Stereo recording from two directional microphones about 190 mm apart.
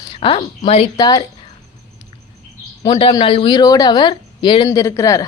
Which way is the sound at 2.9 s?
30° left (ahead or behind).